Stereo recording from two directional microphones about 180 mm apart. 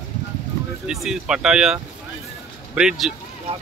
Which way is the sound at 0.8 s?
5° right (ahead or behind).